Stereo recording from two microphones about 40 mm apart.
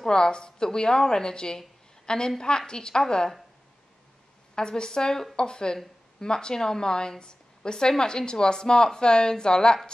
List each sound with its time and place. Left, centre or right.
0.0 s speech: centre
4.6 s speech: centre